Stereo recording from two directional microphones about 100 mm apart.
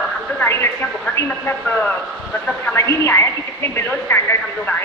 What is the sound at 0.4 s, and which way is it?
Speech, 25° left (ahead or behind).